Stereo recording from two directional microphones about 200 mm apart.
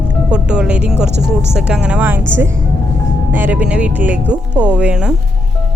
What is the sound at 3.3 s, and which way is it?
Speech, 10° right (ahead or behind).